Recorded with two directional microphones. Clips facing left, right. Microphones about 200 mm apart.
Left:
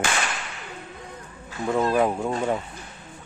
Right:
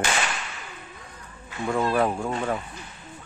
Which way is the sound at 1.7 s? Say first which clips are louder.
Left 2 dB; 20° left (ahead or behind).